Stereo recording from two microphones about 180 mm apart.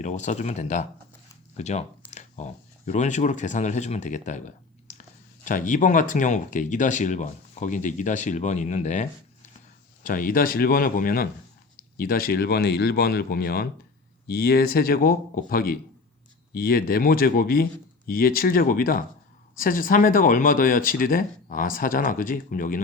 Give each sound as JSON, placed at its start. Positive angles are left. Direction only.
{"t": 0.0, "sound": "speech", "side_deg": 40}